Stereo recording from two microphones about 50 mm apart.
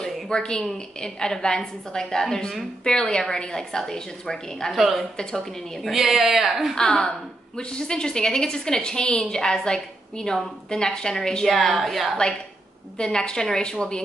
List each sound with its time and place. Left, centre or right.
0.0 s a sound: centre
1.0 s a woman's voice: centre
5.1 s a woman's voice: centre
5.9 s speech: centre
6.8 s a woman's voice: centre
12.9 s a woman's voice: centre